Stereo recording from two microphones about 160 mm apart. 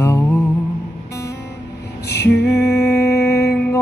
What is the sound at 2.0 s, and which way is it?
Female singing, 90° left.